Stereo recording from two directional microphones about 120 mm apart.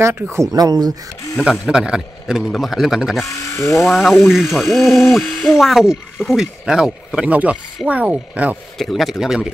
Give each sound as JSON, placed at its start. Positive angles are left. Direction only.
{"t": 0.0, "sound": "speech", "side_deg": -20}
{"t": 1.4, "sound": "speech", "side_deg": -5}
{"t": 3.3, "sound": "speech", "side_deg": 25}
{"t": 3.7, "sound": "speech", "side_deg": 0}
{"t": 8.7, "sound": "speech", "side_deg": 0}